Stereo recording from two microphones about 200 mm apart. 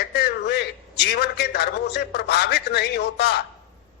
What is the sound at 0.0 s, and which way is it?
A man's voice, 55° left (ahead or behind).